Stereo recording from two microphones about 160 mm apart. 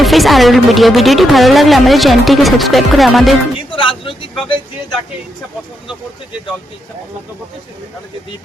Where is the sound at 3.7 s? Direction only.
35° left (ahead or behind).